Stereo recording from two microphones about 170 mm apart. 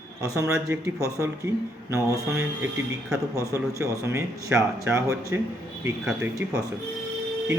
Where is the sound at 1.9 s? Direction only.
15° right (ahead or behind).